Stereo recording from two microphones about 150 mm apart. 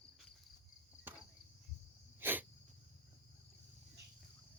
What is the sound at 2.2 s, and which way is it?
Cricket, 15° right (ahead or behind).